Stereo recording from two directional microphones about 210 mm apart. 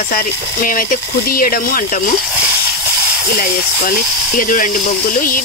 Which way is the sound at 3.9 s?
40° left (ahead or behind).